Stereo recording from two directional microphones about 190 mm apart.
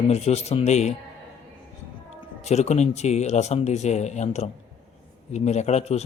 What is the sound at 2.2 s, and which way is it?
A man's voice, 35° left (ahead or behind).